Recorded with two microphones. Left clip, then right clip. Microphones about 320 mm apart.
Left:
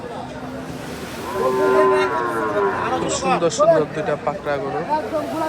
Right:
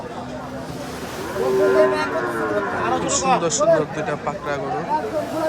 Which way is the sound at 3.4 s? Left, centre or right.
Centre.